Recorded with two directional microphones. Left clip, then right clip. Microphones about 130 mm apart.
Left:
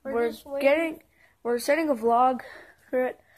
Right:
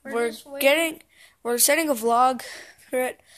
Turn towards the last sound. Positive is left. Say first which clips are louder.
# right 1 dB
turn(degrees=-10)  # may be behind; listen again after turning